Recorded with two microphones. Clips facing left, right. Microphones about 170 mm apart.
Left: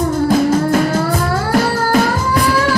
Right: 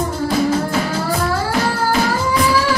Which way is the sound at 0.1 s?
55° left (ahead or behind).